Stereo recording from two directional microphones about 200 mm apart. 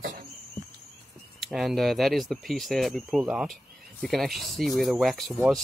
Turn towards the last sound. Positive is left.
turn(degrees=0)  # may be behind; listen again after turning